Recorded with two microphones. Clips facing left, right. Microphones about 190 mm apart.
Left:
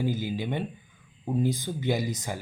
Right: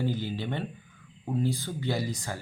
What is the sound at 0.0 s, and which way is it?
Speech, 10° left (ahead or behind).